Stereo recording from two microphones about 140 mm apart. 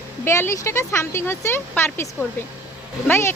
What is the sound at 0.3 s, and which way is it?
Speech, 20° left (ahead or behind).